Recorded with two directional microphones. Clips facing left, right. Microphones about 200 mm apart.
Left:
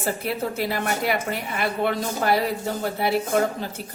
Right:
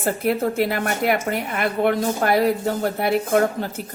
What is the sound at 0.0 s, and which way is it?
A woman's voice, 55° right (ahead or behind).